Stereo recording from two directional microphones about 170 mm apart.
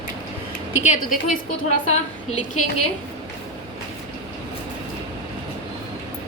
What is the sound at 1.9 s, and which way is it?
Speech, 45° left (ahead or behind).